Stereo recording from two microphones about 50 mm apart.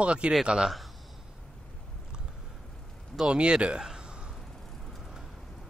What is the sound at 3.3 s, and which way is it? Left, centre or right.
Speech, right.